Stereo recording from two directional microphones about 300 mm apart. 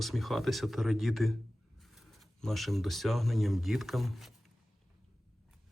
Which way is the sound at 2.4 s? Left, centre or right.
Centre.